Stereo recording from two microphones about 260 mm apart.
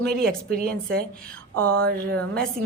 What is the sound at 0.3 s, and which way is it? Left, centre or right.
Speech, right.